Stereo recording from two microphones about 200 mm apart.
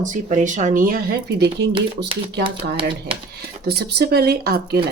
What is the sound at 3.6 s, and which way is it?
Speech, 50° right (ahead or behind).